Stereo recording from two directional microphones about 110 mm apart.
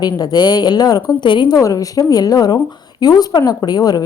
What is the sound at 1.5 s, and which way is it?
A woman's voice, 30° left (ahead or behind).